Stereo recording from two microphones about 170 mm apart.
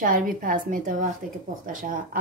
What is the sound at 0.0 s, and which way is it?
A woman's voice, 50° right (ahead or behind).